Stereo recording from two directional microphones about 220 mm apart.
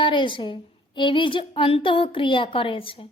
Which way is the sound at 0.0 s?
20° left (ahead or behind).